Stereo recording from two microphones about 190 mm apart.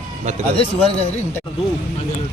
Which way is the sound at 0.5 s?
30° left (ahead or behind).